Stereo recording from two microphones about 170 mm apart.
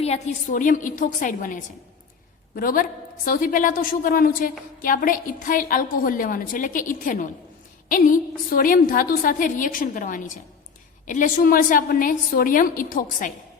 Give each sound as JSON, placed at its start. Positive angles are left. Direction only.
{"t": 0.0, "sound": "a woman's voice", "side_deg": 40}